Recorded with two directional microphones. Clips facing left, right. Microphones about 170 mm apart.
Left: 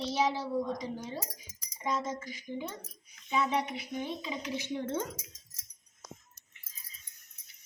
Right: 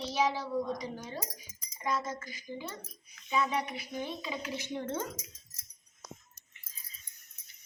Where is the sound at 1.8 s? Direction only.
20° left (ahead or behind).